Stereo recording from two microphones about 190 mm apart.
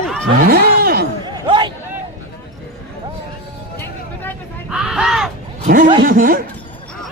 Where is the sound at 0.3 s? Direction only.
50° right (ahead or behind).